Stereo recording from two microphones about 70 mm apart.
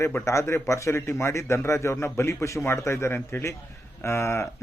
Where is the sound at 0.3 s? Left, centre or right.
Left.